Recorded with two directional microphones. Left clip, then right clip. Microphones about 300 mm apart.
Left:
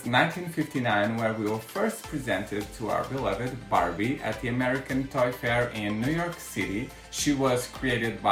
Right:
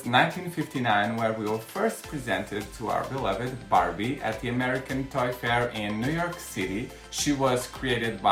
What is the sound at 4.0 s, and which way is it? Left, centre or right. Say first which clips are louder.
Speech: even; centre.